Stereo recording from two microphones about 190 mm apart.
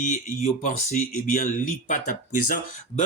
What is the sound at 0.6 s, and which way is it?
Speech, 40° left (ahead or behind).